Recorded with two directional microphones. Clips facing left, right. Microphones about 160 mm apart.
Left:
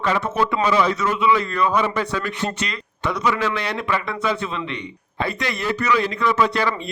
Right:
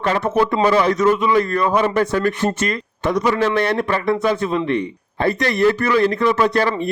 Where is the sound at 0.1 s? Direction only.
35° right (ahead or behind).